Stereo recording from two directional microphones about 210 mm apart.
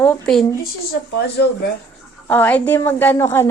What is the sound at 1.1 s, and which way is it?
Speech, 50° left (ahead or behind).